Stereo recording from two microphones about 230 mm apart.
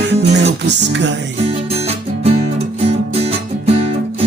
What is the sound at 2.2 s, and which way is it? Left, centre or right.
Music, right.